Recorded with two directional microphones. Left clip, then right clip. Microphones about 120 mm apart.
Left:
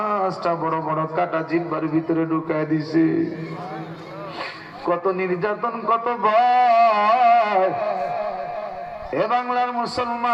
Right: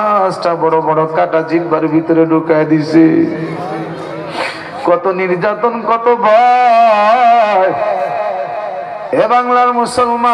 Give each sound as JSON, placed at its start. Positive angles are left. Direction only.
{"t": 0.0, "sound": "a man's voice", "side_deg": -40}
{"t": 4.9, "sound": "a man's voice", "side_deg": -45}
{"t": 7.7, "sound": "a sound", "side_deg": -20}
{"t": 9.1, "sound": "a man's voice", "side_deg": -45}